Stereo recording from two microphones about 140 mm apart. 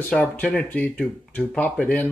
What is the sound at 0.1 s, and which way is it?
Speech, 5° left (ahead or behind).